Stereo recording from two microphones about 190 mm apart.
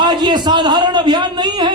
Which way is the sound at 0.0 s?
20° right (ahead or behind).